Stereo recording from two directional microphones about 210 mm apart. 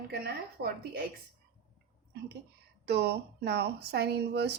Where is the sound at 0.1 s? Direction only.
50° right (ahead or behind).